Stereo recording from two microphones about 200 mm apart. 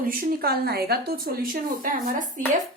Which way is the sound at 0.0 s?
45° right (ahead or behind).